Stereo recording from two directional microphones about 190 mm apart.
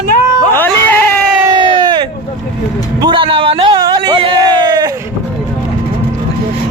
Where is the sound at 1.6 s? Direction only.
25° right (ahead or behind).